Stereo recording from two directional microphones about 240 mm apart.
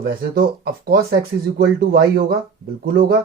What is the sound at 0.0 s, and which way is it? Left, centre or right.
Speech, right.